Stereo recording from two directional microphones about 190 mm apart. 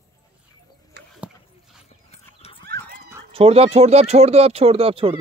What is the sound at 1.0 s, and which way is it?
Dog, 60° right (ahead or behind).